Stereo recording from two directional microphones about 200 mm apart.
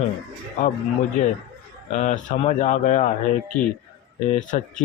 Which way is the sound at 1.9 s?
35° left (ahead or behind).